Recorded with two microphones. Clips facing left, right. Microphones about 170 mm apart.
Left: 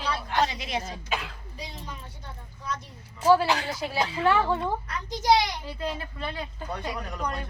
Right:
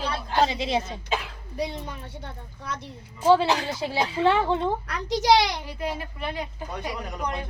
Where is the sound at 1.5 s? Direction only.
65° right (ahead or behind).